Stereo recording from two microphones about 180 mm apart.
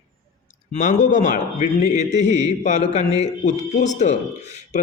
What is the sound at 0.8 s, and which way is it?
A man's voice, 45° left (ahead or behind).